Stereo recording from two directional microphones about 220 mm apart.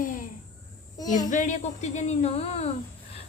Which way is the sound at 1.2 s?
35° left (ahead or behind).